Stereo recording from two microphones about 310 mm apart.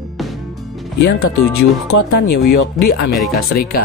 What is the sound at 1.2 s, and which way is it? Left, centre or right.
Speech, left.